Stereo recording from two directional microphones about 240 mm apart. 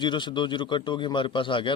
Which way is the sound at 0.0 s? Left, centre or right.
Centre.